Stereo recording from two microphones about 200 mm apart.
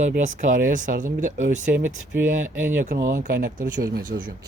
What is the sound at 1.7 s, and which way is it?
Speech, 10° right (ahead or behind).